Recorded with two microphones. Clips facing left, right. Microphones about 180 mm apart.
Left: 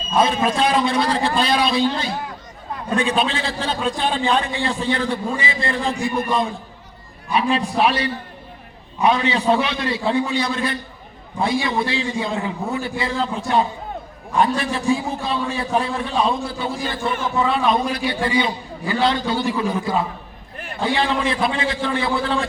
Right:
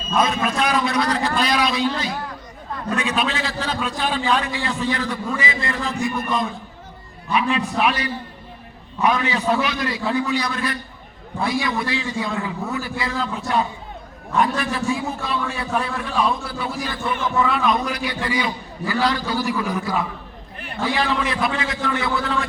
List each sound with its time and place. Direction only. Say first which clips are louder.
0.2 s a man's voice: left 3 dB; 30° left (ahead or behind)
7.3 s a man's voice: left 1 dB; 10° left (ahead or behind)
7.8 s a man's voice: left 2 dB; 30° left (ahead or behind)